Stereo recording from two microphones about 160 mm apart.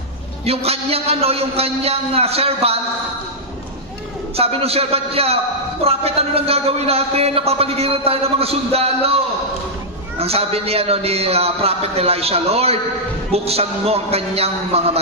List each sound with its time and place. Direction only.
0.5 s a man's voice: 40° right (ahead or behind)
4.4 s a man's voice: 40° right (ahead or behind)